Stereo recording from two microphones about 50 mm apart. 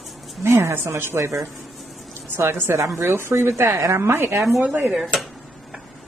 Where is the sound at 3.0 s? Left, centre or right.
Right.